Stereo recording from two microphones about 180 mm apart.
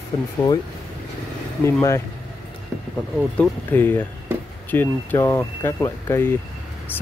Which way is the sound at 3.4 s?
10° left (ahead or behind).